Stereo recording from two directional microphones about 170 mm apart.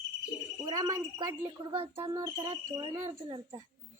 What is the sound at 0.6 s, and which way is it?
A woman's voice, 20° right (ahead or behind).